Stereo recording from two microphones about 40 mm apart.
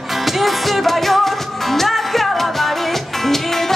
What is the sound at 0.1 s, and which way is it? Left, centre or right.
Music, centre.